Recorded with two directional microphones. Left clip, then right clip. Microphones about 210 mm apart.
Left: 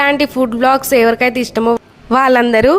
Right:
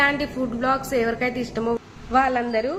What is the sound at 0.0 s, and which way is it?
A woman's voice, 55° left (ahead or behind).